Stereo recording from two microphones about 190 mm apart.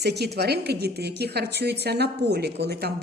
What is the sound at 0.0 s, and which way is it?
A woman's voice, 60° right (ahead or behind).